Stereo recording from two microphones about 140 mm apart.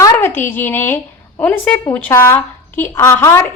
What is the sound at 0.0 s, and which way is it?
A woman's voice, 15° left (ahead or behind).